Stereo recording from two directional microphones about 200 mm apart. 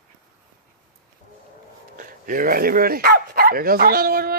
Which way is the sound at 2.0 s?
45° right (ahead or behind).